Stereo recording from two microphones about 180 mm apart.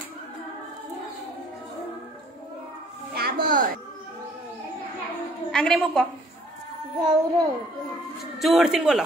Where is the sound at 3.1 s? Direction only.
60° right (ahead or behind).